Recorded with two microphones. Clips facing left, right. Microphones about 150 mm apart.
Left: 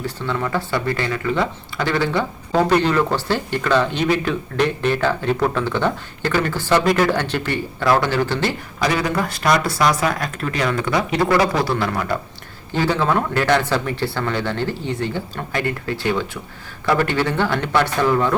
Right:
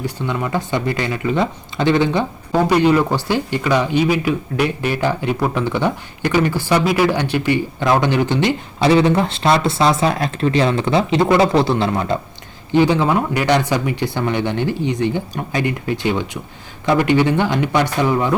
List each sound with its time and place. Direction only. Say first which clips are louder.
0.0 s speech: right 1 dB; 15° right (ahead or behind)